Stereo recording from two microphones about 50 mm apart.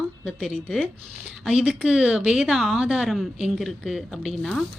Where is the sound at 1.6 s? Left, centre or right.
Right.